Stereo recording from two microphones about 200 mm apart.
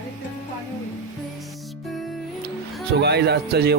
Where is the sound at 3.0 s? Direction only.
55° right (ahead or behind).